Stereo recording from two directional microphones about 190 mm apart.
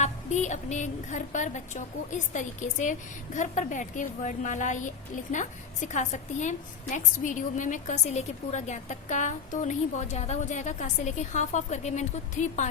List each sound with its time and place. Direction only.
0.0 s a woman's voice: 40° left (ahead or behind)